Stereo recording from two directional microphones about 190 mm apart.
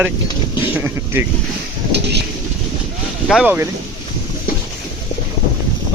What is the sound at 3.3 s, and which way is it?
Speech, 10° right (ahead or behind).